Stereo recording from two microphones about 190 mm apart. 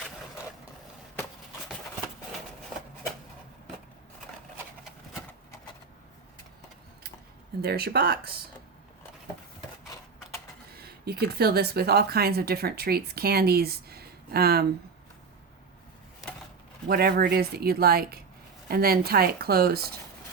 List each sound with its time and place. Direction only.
7.6 s a woman's voice: 55° right (ahead or behind)
10.7 s speech: 55° right (ahead or behind)
16.9 s a woman's voice: 55° right (ahead or behind)